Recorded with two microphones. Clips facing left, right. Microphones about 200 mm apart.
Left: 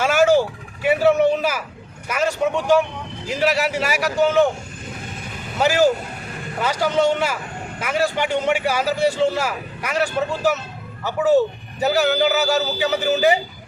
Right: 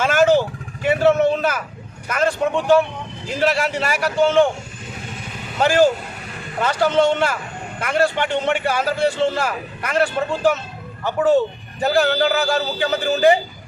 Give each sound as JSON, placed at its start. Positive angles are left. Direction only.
{"t": 0.0, "sound": "vehicle", "side_deg": 10}
{"t": 2.0, "sound": "a man's voice", "side_deg": 10}
{"t": 5.5, "sound": "a man's voice", "side_deg": 10}